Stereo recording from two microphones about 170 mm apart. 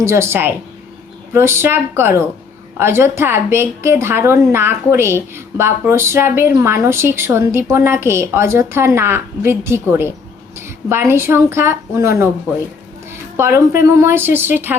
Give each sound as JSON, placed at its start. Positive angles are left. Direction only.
{"t": 0.0, "sound": "a woman's voice", "side_deg": -15}
{"t": 13.3, "sound": "a woman's voice", "side_deg": -15}